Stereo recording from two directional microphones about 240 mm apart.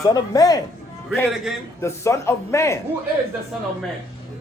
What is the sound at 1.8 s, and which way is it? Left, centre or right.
Speech, centre.